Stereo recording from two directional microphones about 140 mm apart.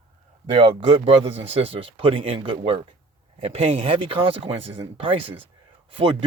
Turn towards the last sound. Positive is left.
turn(degrees=-40)  # may be behind; listen again after turning